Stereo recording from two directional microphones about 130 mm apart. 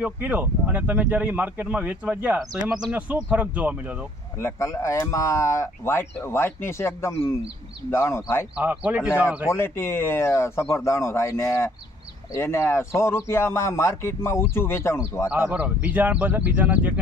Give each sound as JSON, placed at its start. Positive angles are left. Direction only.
{"t": 0.0, "sound": "speech", "side_deg": -10}
{"t": 4.4, "sound": "speech", "side_deg": 20}
{"t": 8.5, "sound": "speech", "side_deg": -10}
{"t": 9.5, "sound": "speech", "side_deg": 20}
{"t": 15.2, "sound": "speech", "side_deg": -10}